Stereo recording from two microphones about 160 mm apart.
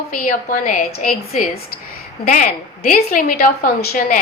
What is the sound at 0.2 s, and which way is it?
Speech, 60° left (ahead or behind).